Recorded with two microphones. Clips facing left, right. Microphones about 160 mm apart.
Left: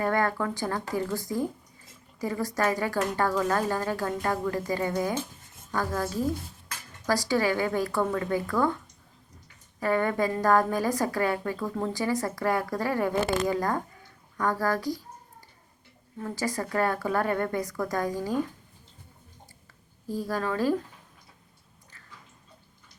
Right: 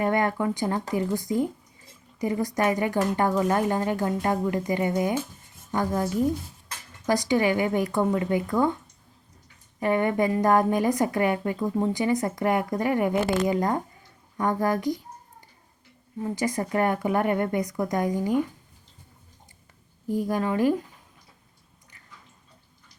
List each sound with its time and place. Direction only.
0.0 s a woman's voice: 20° right (ahead or behind)
9.8 s a woman's voice: 20° right (ahead or behind)
16.2 s a woman's voice: 20° right (ahead or behind)
20.1 s speech: 20° right (ahead or behind)